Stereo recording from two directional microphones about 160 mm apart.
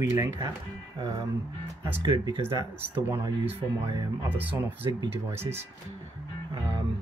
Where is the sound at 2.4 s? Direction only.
15° right (ahead or behind).